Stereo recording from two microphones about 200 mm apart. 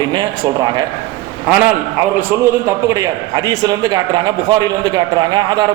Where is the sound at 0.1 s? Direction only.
20° right (ahead or behind).